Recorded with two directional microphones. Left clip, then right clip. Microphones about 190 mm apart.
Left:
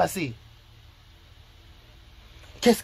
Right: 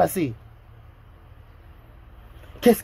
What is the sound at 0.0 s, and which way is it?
Speech, 20° right (ahead or behind).